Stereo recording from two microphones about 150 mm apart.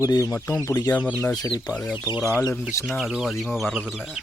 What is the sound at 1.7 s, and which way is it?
Speech, 30° left (ahead or behind).